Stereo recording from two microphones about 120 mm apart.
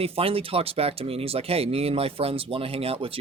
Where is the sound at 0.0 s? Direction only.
50° right (ahead or behind).